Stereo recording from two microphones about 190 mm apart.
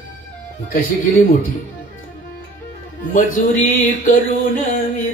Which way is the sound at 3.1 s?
45° left (ahead or behind).